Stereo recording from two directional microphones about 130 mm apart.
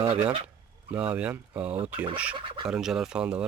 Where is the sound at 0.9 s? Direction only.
10° right (ahead or behind).